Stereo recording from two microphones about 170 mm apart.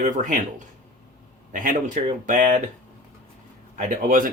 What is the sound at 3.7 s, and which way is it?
Speech, 45° right (ahead or behind).